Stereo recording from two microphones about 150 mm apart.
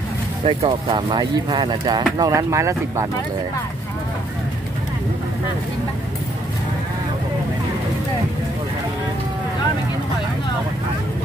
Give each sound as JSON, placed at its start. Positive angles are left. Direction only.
{"t": 0.5, "sound": "speech", "side_deg": -35}